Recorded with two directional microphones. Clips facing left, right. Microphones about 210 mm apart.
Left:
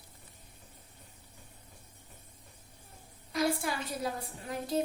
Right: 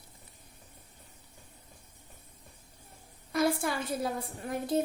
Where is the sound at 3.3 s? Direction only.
55° right (ahead or behind).